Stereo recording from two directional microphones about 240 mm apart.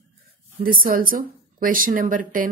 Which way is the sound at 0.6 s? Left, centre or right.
Right.